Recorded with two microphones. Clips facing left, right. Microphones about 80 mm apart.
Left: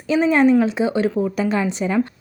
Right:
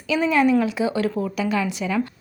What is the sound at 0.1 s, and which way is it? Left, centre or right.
A woman's voice, left.